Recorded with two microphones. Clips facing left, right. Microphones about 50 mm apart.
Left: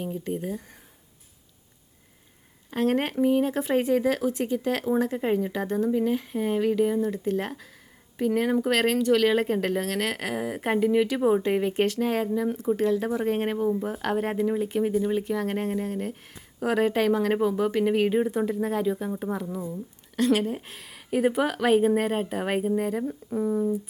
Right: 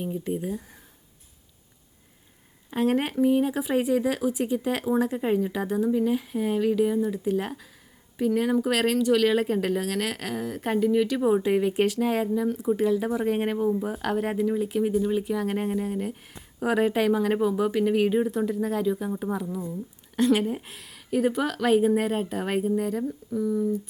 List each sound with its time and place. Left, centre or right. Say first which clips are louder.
0.0 s speech: right 1 dB; centre
2.6 s speech: even; centre
11.1 s speech: even; centre
14.4 s speech: even; centre
14.7 s speech: even; centre
20.1 s speech: right 1 dB; centre
20.4 s speech: right 1 dB; centre
23.0 s speech: even; left